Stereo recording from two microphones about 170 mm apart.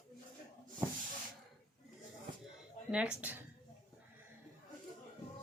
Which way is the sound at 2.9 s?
5° right (ahead or behind).